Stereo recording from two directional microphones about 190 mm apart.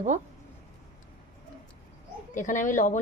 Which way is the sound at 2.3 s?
40° left (ahead or behind).